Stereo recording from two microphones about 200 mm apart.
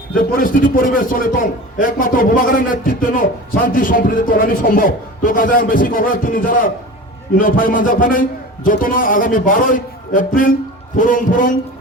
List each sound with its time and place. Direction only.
0.3 s a man's voice: 45° left (ahead or behind)